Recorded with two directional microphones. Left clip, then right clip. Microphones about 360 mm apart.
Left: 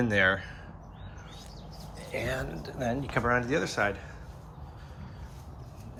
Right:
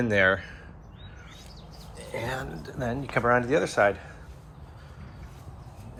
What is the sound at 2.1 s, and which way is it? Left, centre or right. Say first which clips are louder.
Speech: even; centre.